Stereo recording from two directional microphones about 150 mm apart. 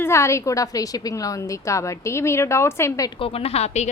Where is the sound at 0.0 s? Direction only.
20° left (ahead or behind).